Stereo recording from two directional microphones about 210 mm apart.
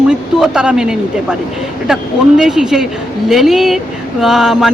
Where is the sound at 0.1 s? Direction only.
5° right (ahead or behind).